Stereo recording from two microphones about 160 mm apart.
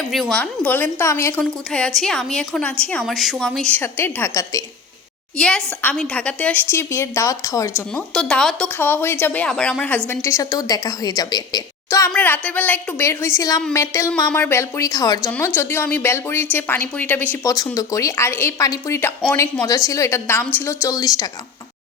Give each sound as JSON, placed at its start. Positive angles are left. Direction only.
{"t": 0.1, "sound": "a woman's voice", "side_deg": 5}
{"t": 1.4, "sound": "a woman's voice", "side_deg": 5}
{"t": 5.4, "sound": "a woman's voice", "side_deg": 5}
{"t": 8.1, "sound": "a woman's voice", "side_deg": 5}
{"t": 15.5, "sound": "a woman's voice", "side_deg": 10}
{"t": 17.4, "sound": "a woman's voice", "side_deg": 20}